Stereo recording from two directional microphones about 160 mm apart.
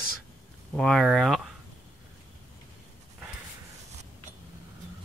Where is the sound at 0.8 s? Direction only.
Centre (ahead or behind).